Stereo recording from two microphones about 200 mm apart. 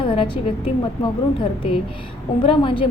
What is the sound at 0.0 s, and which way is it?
A woman's voice, 25° left (ahead or behind).